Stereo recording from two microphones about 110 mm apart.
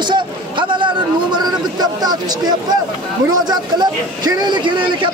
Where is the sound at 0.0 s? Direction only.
45° right (ahead or behind).